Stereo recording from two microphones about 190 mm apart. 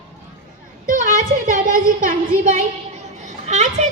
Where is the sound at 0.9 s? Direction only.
45° right (ahead or behind).